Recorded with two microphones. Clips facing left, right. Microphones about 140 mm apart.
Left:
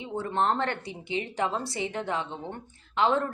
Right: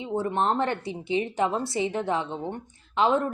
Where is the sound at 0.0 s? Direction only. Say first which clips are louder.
Right 2 dB; 20° right (ahead or behind).